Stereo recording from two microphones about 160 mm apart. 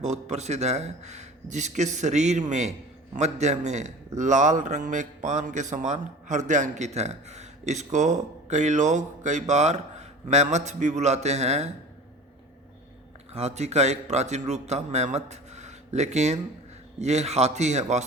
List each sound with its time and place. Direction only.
0.0 s a man's voice: 45° right (ahead or behind)
13.3 s a man's voice: 45° right (ahead or behind)